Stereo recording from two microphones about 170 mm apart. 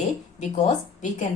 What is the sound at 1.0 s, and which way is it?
Speech, 45° left (ahead or behind).